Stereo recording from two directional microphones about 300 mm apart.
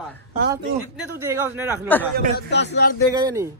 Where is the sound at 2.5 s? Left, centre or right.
Left.